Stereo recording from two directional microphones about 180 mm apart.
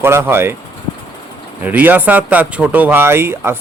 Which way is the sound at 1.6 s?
10° right (ahead or behind).